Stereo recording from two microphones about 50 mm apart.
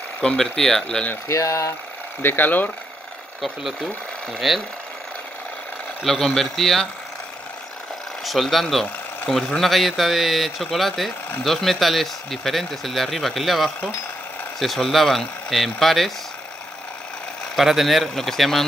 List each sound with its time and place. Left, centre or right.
0.2 s speech: centre
1.3 s speech: left
2.2 s speech: left
3.3 s speech: centre
6.0 s speech: centre
8.2 s speech: centre
17.6 s speech: centre